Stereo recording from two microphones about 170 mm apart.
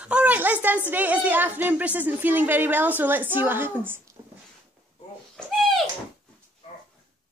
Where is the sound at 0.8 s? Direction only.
10° right (ahead or behind).